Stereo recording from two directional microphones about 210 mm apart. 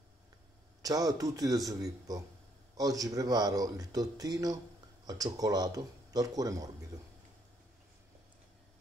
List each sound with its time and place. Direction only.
0.8 s speech: 15° right (ahead or behind)